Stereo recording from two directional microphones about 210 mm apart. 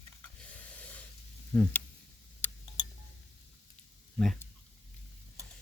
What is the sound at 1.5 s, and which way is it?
Speech, 5° left (ahead or behind).